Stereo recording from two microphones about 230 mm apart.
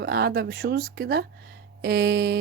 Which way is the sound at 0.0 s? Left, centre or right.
Right.